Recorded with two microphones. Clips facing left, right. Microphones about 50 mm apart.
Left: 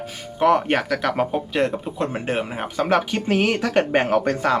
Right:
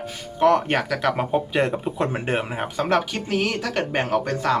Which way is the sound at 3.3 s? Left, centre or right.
Left.